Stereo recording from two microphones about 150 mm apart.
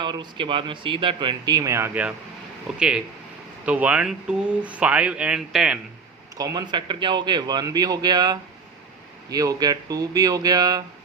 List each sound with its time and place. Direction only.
0.0 s speech: 30° right (ahead or behind); by 5.8 s 5° right (ahead or behind)
6.3 s a man's voice: 25° right (ahead or behind)